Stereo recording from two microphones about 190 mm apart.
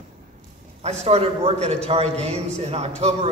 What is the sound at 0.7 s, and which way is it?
A man's voice, 35° right (ahead or behind).